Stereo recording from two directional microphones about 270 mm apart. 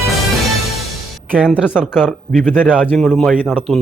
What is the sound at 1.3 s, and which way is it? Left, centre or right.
A man's voice, centre.